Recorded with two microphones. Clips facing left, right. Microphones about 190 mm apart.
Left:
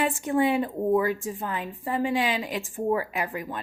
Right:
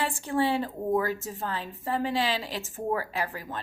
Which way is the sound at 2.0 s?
35° right (ahead or behind).